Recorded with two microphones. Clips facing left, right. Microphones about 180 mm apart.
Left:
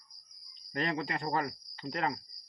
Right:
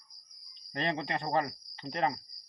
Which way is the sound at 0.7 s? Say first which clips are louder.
Even; 25° right (ahead or behind).